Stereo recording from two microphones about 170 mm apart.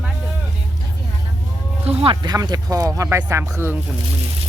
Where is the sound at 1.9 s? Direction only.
35° right (ahead or behind).